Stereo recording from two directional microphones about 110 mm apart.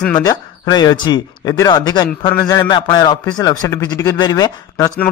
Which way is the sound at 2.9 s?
40° left (ahead or behind).